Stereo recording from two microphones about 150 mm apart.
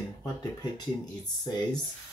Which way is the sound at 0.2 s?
25° left (ahead or behind).